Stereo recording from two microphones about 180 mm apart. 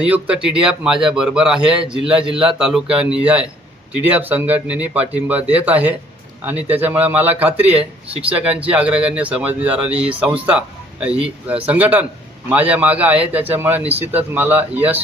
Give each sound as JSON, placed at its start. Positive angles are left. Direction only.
{"t": 0.0, "sound": "a man's voice", "side_deg": -5}
{"t": 7.7, "sound": "speech", "side_deg": -30}
{"t": 8.3, "sound": "a man's voice", "side_deg": -5}